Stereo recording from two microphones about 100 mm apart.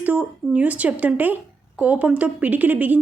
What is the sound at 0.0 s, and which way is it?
Speech, 15° right (ahead or behind).